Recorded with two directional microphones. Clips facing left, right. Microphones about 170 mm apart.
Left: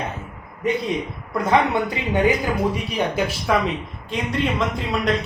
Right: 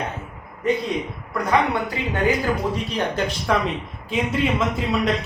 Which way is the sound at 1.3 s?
20° left (ahead or behind).